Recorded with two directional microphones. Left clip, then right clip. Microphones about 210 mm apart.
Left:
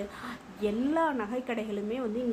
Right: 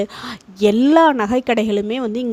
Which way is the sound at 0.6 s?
55° right (ahead or behind).